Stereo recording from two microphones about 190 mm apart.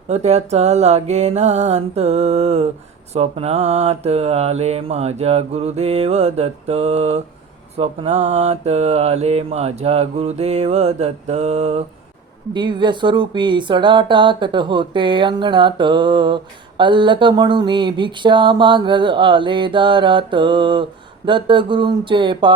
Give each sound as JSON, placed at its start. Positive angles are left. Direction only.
{"t": 0.1, "sound": "mantra", "side_deg": -35}
{"t": 12.5, "sound": "speech", "side_deg": -25}